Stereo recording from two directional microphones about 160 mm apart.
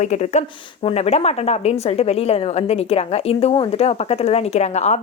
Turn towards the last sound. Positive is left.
turn(degrees=45)  # may be behind; listen again after turning